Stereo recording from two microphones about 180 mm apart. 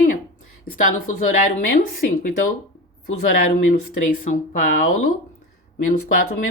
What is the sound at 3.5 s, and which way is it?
Speech, 45° left (ahead or behind).